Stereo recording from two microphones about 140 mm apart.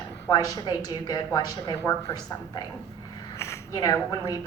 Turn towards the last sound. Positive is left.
turn(degrees=25)  # may be behind; listen again after turning